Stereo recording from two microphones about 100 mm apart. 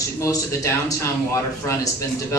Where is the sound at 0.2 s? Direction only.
30° left (ahead or behind).